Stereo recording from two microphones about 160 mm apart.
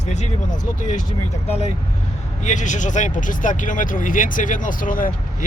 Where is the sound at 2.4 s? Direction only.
50° left (ahead or behind).